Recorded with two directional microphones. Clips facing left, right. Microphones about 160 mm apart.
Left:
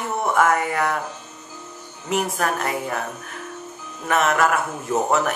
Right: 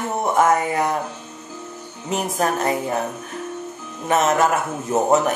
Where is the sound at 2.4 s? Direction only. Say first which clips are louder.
Right 3 dB; 25° right (ahead or behind).